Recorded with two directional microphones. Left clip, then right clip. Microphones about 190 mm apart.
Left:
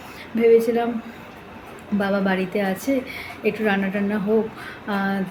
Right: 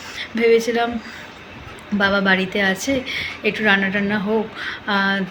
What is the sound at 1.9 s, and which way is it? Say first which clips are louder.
Speech: right 5 dB; 5° left (ahead or behind).